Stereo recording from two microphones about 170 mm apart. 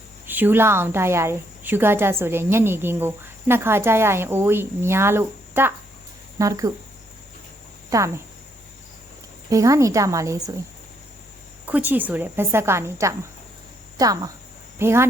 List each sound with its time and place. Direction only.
0.3 s a woman's voice: 10° right (ahead or behind)
7.9 s speech: 20° right (ahead or behind)
9.5 s a woman's voice: 20° right (ahead or behind)
11.6 s a woman's voice: 10° right (ahead or behind)